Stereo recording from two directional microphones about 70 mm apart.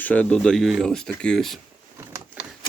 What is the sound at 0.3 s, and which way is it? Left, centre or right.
Speech, centre.